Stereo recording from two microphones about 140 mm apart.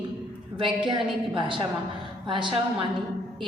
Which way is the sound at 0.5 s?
35° right (ahead or behind).